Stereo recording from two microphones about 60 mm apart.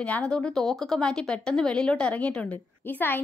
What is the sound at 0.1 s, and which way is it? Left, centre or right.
Speech, centre.